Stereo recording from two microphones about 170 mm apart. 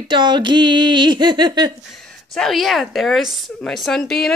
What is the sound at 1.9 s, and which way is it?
A woman's voice, centre (ahead or behind).